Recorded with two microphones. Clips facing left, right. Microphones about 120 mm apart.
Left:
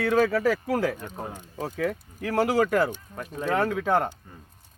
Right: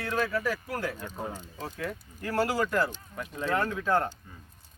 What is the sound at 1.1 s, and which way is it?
Speech, 10° left (ahead or behind).